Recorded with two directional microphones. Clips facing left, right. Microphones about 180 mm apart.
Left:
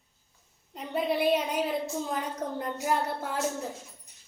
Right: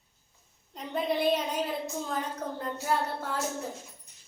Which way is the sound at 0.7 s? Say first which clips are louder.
Left 1 dB; 5° left (ahead or behind).